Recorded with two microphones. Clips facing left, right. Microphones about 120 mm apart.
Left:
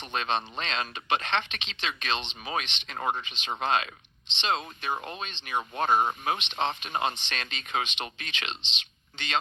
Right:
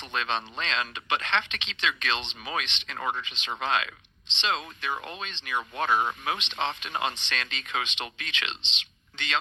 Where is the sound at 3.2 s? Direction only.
35° left (ahead or behind).